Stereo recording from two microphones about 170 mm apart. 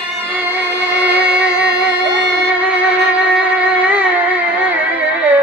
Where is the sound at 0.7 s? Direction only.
90° right.